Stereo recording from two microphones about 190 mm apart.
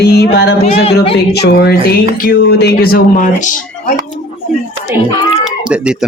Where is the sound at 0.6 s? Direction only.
30° left (ahead or behind).